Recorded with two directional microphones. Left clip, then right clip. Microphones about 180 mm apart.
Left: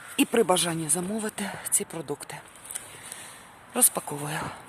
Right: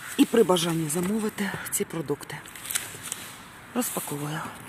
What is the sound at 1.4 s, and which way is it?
Speech, centre (ahead or behind).